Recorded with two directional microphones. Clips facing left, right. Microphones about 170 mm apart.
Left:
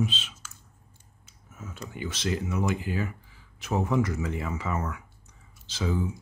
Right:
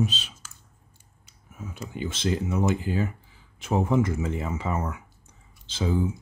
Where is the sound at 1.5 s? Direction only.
15° right (ahead or behind).